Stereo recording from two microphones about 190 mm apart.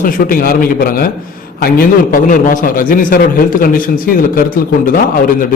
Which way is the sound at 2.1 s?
45° left (ahead or behind).